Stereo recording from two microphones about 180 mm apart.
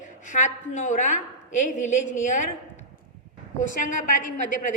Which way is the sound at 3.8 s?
45° left (ahead or behind).